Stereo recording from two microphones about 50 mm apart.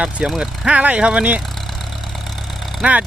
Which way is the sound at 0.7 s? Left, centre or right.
Right.